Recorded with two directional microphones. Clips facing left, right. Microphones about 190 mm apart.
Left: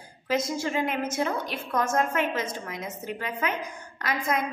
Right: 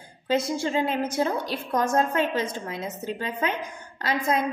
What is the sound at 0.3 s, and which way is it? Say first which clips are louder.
A woman's voice: right 3 dB; 30° right (ahead or behind).